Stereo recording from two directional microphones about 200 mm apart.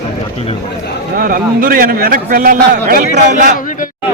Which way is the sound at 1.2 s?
45° right (ahead or behind).